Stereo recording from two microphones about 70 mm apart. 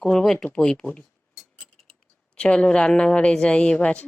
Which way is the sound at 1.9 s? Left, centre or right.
Centre.